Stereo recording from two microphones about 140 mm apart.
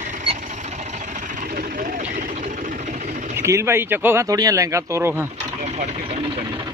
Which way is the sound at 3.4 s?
20° right (ahead or behind).